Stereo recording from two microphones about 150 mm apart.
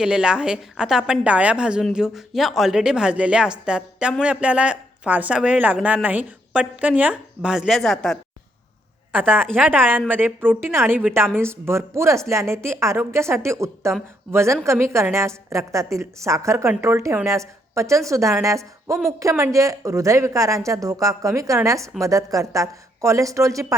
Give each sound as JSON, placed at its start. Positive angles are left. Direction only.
{"t": 0.0, "sound": "a woman's voice", "side_deg": -5}
{"t": 9.1, "sound": "speech", "side_deg": -15}